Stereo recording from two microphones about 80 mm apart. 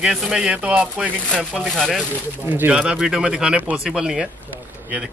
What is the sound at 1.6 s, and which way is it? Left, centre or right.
Speech, centre.